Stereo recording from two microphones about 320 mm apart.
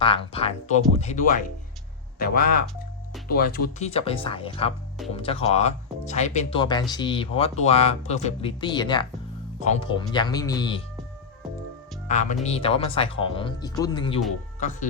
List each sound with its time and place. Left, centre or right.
0.0 s speech: centre
12.0 s speech: left